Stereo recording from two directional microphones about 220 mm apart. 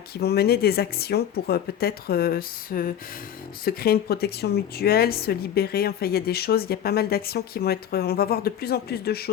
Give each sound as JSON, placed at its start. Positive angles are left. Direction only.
{"t": 0.2, "sound": "a woman's voice", "side_deg": 45}